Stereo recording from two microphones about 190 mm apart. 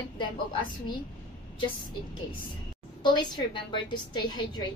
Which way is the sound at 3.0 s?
25° left (ahead or behind).